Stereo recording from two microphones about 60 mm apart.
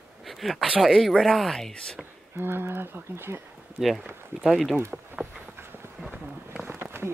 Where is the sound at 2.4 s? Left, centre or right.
Right.